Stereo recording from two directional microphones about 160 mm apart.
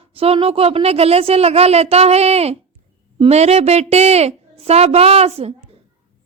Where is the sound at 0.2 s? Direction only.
35° right (ahead or behind).